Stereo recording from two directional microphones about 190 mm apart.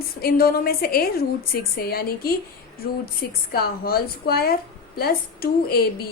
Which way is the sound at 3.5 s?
55° left (ahead or behind).